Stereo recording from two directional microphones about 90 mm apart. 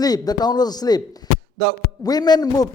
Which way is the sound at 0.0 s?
45° left (ahead or behind).